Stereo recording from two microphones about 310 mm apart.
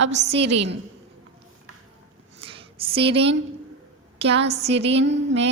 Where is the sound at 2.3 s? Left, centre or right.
Centre.